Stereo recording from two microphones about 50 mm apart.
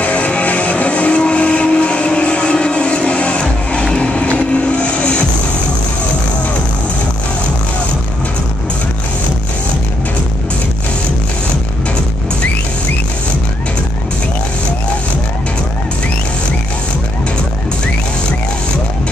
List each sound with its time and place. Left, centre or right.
0.0 s music: left